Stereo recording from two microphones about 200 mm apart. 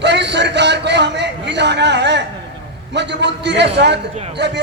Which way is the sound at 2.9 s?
60° right (ahead or behind).